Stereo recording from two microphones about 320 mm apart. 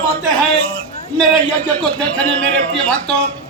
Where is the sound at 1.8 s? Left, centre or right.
Centre.